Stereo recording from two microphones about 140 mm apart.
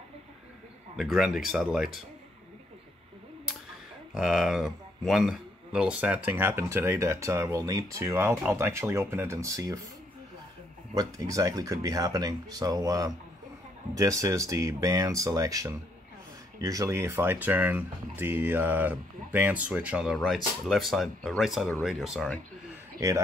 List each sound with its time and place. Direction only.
0.9 s speech: centre (ahead or behind)
4.1 s speech: 5° right (ahead or behind); by 9.8 s 20° right (ahead or behind)
11.0 s speech: 25° right (ahead or behind); by 22.3 s centre (ahead or behind)
22.9 s a man's voice: 20° right (ahead or behind)